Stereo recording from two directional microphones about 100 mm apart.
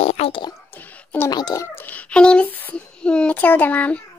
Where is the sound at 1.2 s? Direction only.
45° left (ahead or behind).